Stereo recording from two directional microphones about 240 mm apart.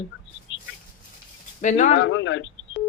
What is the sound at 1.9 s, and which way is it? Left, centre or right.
Speech, left.